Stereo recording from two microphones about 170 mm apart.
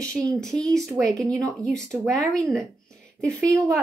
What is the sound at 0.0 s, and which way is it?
A woman's voice, 5° left (ahead or behind).